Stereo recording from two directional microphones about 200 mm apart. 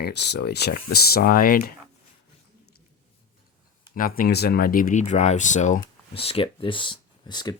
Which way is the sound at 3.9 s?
45° left (ahead or behind).